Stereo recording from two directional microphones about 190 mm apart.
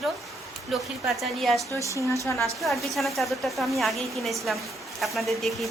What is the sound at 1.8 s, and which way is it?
Speech, 15° left (ahead or behind).